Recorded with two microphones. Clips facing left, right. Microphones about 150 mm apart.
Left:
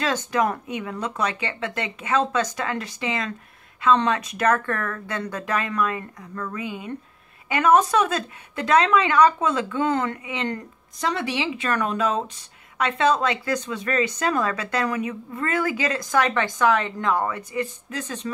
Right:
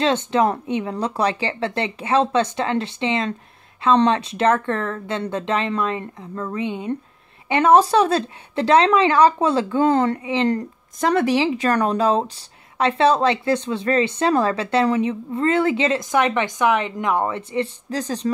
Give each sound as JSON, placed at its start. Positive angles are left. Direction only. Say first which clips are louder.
{"t": 0.0, "sound": "speech", "louder": "right 5 dB", "side_deg": -25}
{"t": 11.0, "sound": "speech", "louder": "right 8 dB", "side_deg": -50}